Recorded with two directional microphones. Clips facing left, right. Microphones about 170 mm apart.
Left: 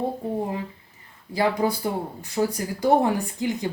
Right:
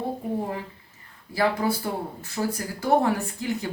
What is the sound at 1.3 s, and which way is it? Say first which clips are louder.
Speech: left 1 dB; 20° left (ahead or behind).